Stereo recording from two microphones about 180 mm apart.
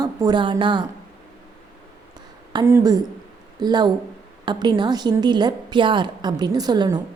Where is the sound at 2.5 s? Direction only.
15° right (ahead or behind).